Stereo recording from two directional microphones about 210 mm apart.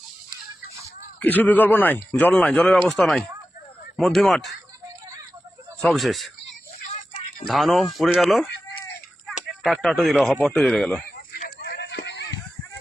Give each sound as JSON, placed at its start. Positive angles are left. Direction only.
{"t": 0.7, "sound": "speech", "side_deg": 10}
{"t": 5.8, "sound": "speech", "side_deg": 0}
{"t": 7.4, "sound": "speech", "side_deg": 0}
{"t": 9.6, "sound": "speech", "side_deg": 0}
{"t": 11.3, "sound": "a sound", "side_deg": 45}